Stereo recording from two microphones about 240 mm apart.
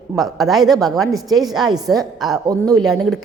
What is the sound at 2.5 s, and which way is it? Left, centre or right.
Speech, centre.